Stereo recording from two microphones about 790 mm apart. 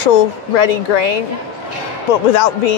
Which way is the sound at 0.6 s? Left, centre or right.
Left.